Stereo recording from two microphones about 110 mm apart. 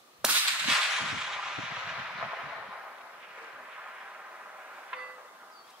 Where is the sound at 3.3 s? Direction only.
10° right (ahead or behind).